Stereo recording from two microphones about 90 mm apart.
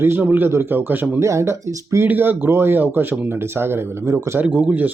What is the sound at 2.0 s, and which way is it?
Speech, 20° right (ahead or behind).